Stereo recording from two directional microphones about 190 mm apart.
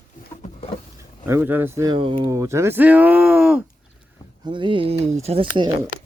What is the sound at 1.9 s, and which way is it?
Speech, 25° right (ahead or behind).